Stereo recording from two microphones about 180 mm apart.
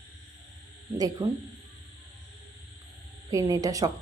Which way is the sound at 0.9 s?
20° right (ahead or behind).